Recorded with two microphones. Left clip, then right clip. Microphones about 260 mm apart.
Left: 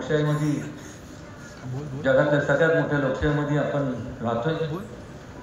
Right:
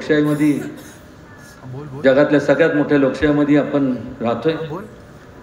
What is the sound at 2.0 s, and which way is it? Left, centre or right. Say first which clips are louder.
A man's voice: right 7 dB; right.